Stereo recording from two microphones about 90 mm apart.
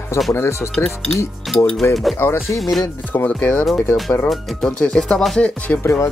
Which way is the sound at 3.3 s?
15° left (ahead or behind).